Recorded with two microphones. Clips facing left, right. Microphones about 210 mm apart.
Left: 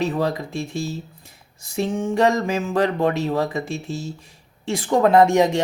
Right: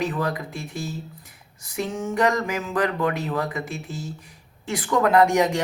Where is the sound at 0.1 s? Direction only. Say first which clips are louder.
Left 4 dB; 25° left (ahead or behind).